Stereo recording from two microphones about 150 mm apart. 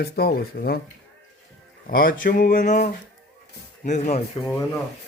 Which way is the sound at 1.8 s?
75° left (ahead or behind).